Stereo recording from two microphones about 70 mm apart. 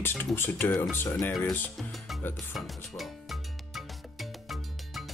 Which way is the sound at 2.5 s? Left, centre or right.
Centre.